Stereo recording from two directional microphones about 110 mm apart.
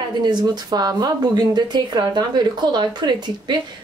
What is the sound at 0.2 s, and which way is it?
Speech, 40° right (ahead or behind).